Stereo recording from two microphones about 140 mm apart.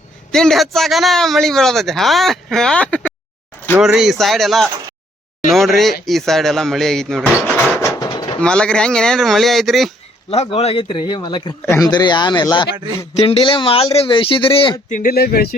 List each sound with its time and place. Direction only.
0.3 s a man's voice: 5° left (ahead or behind)
3.8 s a man's voice: 5° right (ahead or behind)
7.4 s speech: 20° left (ahead or behind)
7.9 s drawer open or close: 30° left (ahead or behind)
8.4 s a man's voice: 5° left (ahead or behind)
10.2 s speech: 45° left (ahead or behind)
11.6 s a man's voice: 20° left (ahead or behind)
11.9 s speech: 30° left (ahead or behind)
14.9 s speech: 90° left